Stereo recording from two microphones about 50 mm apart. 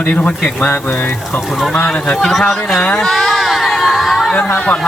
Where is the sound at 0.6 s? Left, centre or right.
Left.